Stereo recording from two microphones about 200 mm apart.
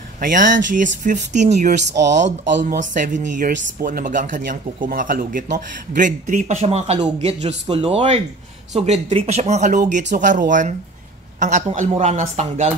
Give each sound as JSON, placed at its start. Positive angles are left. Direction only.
{"t": 0.2, "sound": "speech", "side_deg": -40}
{"t": 2.8, "sound": "speech", "side_deg": -40}